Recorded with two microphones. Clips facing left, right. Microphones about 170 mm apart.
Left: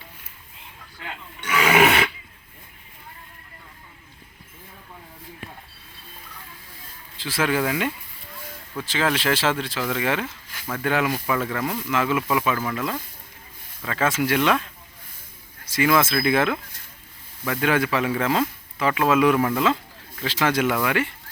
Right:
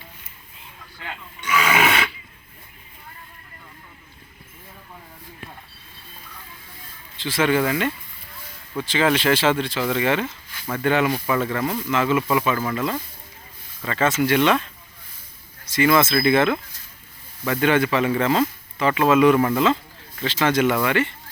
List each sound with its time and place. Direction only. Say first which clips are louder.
1.7 s roar: left 5 dB; 35° left (ahead or behind)
7.2 s speech: right 3 dB; 5° left (ahead or behind)
15.7 s speech: right 2 dB; 5° left (ahead or behind)